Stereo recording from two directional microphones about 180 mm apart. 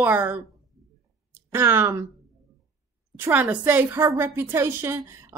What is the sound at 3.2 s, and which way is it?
A woman's voice, 10° right (ahead or behind).